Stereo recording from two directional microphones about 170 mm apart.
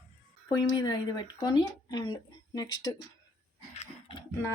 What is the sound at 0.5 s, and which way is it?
Speech, 25° left (ahead or behind).